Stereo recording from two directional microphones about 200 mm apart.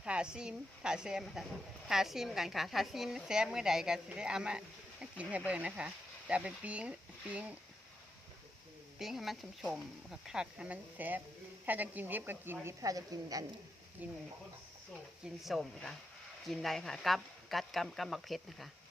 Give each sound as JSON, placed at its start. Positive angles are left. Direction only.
{"t": 0.0, "sound": "a woman's voice", "side_deg": -5}
{"t": 9.0, "sound": "a woman's voice", "side_deg": 0}
{"t": 15.2, "sound": "a woman's voice", "side_deg": 0}